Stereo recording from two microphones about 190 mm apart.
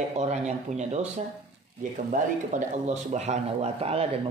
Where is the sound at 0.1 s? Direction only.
35° right (ahead or behind).